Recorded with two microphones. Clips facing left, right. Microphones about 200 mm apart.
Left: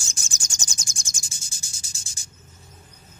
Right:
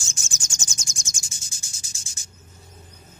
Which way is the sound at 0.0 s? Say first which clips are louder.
Right 1 dB; 35° left (ahead or behind).